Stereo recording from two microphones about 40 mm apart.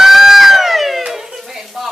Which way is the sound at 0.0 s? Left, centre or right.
Centre.